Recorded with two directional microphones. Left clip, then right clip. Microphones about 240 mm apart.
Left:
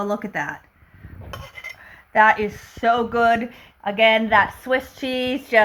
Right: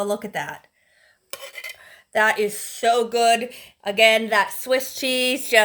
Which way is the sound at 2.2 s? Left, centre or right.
Right.